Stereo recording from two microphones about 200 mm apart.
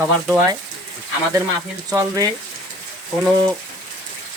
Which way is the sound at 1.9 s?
20° right (ahead or behind).